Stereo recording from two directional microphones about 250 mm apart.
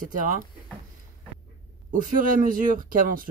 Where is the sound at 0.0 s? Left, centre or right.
Right.